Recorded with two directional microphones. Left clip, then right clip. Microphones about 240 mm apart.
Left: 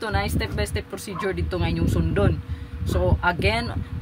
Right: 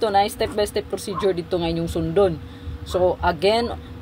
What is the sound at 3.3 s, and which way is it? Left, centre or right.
Speech, left.